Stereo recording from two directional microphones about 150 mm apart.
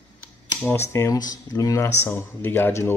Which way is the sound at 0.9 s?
20° left (ahead or behind).